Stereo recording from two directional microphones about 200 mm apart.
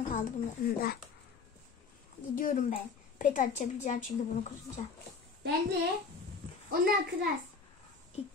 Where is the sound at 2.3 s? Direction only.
40° left (ahead or behind).